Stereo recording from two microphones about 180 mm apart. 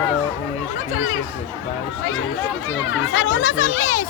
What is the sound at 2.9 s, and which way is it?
Speech, 90° left.